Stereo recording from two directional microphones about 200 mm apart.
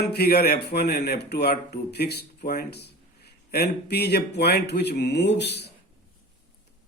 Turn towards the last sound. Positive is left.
turn(degrees=55)  # may be behind; listen again after turning